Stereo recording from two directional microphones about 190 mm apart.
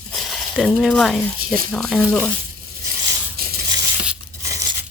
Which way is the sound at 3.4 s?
55° right (ahead or behind).